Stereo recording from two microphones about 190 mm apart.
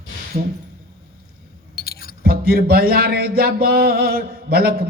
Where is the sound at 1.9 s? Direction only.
55° left (ahead or behind).